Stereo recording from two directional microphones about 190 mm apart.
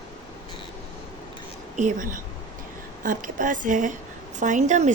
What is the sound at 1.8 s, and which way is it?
A woman's voice, 40° right (ahead or behind).